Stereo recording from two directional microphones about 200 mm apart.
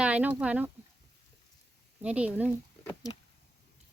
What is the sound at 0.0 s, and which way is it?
Speech, 5° right (ahead or behind).